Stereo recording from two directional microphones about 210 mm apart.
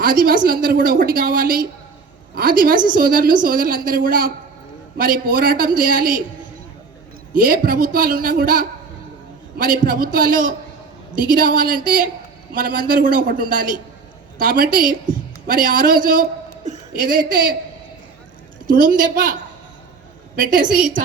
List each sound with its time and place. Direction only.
0.0 s a woman's voice: 40° right (ahead or behind)
7.3 s a woman's voice: 40° right (ahead or behind)
18.7 s a man's voice: 40° right (ahead or behind)
20.3 s a man's voice: 40° right (ahead or behind)